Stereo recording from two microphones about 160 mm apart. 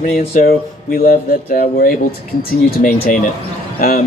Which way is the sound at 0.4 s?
65° left (ahead or behind).